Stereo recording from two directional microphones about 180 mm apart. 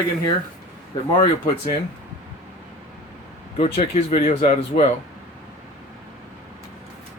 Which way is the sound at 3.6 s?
35° left (ahead or behind).